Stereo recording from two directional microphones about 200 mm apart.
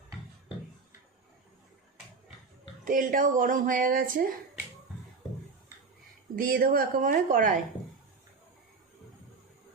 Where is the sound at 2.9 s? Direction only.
40° right (ahead or behind).